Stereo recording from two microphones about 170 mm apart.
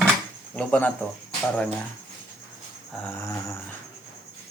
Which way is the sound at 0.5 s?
10° left (ahead or behind).